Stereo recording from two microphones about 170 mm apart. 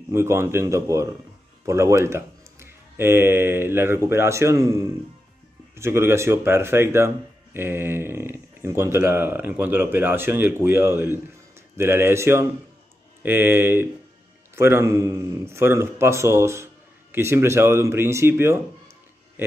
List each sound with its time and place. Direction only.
0.1 s speech: 15° right (ahead or behind)